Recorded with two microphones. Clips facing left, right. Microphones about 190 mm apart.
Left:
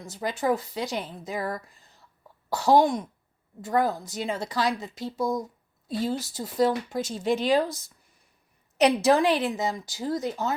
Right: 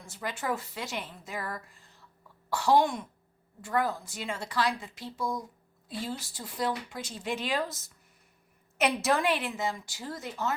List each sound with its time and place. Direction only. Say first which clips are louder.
0.0 s speech: left 7 dB; 40° left (ahead or behind)
9.0 s speech: left 6 dB; 35° left (ahead or behind)